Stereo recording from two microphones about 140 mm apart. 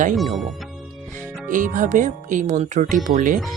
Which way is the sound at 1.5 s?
70° right (ahead or behind).